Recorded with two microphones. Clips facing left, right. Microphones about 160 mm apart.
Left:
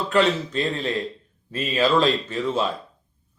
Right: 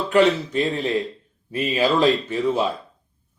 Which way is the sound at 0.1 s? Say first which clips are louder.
Right 4 dB; 15° right (ahead or behind).